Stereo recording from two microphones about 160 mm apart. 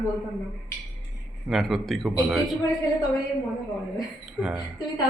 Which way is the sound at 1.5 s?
Centre (ahead or behind).